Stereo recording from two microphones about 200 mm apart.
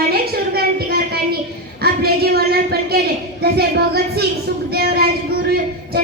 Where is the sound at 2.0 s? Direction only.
50° right (ahead or behind).